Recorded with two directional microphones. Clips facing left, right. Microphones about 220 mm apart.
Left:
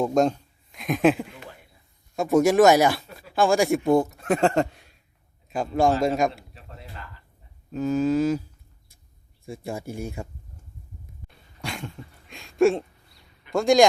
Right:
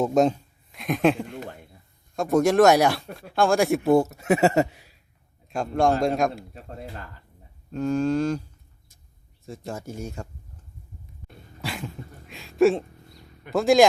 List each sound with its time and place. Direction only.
0.0 s speech: 5° right (ahead or behind)
6.5 s a man's voice: 50° right (ahead or behind)
7.7 s speech: 5° left (ahead or behind)
9.5 s speech: 10° left (ahead or behind)
11.6 s dog: centre (ahead or behind)
12.3 s a sound: centre (ahead or behind)
13.5 s speech: centre (ahead or behind)